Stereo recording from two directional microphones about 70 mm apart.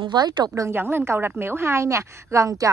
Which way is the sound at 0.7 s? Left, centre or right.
Right.